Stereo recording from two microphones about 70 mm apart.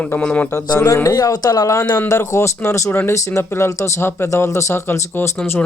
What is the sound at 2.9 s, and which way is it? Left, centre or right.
Speech, left.